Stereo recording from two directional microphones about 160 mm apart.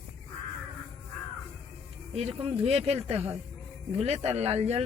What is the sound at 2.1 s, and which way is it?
Speech, 40° right (ahead or behind).